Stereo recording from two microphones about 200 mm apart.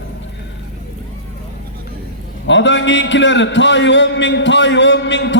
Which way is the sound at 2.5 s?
65° left (ahead or behind).